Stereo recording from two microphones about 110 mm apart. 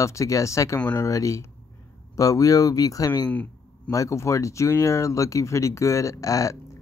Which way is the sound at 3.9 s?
30° left (ahead or behind).